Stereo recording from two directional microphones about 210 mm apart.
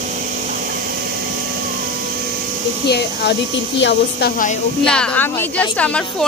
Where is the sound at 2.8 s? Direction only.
50° left (ahead or behind).